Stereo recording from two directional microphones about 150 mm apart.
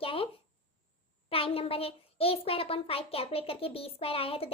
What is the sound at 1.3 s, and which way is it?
A child's voice, 40° left (ahead or behind).